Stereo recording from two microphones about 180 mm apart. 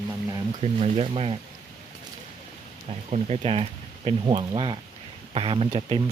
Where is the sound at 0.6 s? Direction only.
35° right (ahead or behind).